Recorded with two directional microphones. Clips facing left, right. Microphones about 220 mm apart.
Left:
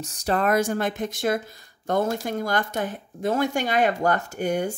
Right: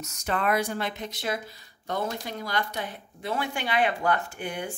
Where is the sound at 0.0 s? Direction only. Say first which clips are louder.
Left 5 dB; 35° left (ahead or behind).